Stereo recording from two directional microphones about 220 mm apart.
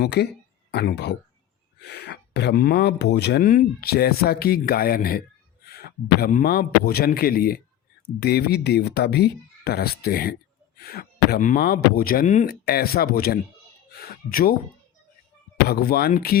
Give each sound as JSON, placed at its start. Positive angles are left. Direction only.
{"t": 0.0, "sound": "speech", "side_deg": 50}
{"t": 12.6, "sound": "speech", "side_deg": 45}
{"t": 15.6, "sound": "speech", "side_deg": 45}